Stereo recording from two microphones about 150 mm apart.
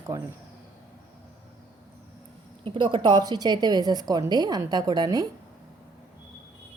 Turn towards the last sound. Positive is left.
turn(degrees=-25)  # may be behind; listen again after turning